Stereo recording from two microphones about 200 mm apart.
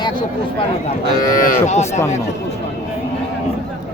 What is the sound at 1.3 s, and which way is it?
Speech, 40° left (ahead or behind).